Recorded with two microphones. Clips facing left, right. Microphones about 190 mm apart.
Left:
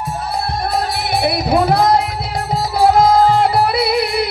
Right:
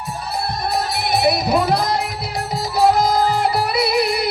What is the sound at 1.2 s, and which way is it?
Music, 55° left (ahead or behind).